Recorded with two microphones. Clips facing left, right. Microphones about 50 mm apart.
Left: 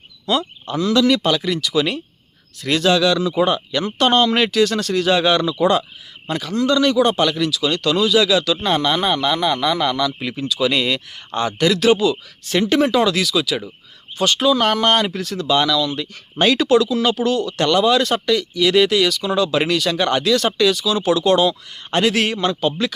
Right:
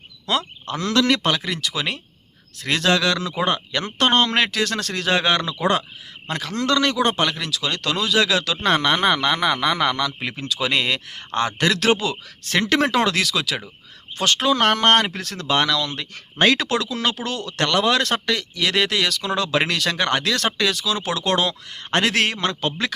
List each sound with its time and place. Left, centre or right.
0.3 s frog: right
0.8 s speech: right
8.6 s speech: right